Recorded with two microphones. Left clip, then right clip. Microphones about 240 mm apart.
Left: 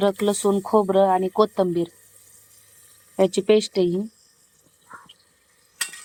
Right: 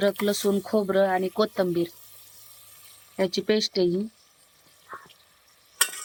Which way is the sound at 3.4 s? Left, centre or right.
Centre.